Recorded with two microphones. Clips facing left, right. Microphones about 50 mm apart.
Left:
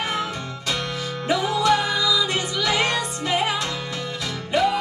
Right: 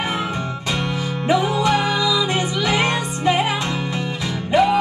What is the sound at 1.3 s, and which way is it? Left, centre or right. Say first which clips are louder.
Music: right 2 dB; right.